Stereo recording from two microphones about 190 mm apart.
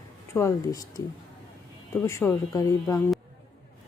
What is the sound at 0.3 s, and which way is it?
Speech, 15° left (ahead or behind).